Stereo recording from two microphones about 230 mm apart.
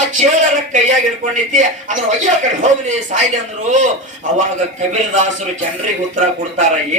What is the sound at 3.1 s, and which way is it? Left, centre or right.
Speech, right.